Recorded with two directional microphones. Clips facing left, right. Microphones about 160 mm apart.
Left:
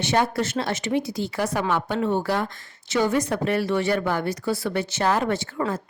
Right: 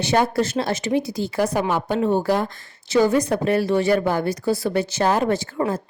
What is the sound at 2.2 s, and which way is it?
A woman's voice, 45° right (ahead or behind).